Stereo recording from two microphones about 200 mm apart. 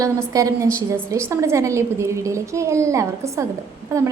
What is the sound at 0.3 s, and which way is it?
A woman's voice, 15° right (ahead or behind).